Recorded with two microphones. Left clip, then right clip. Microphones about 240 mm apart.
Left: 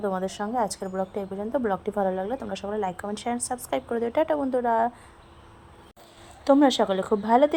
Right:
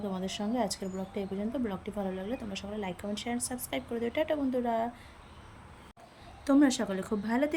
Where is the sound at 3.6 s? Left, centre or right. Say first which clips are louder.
Left 8 dB; centre.